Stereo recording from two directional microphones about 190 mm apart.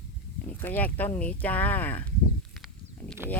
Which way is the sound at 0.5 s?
10° left (ahead or behind).